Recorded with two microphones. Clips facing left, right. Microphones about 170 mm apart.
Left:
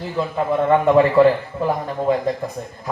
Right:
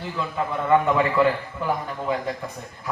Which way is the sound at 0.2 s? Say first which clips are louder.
Left 7 dB; 35° left (ahead or behind).